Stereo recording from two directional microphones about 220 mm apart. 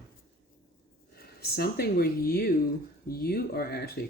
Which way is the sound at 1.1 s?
45° left (ahead or behind).